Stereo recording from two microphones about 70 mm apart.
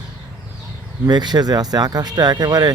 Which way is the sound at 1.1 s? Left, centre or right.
Right.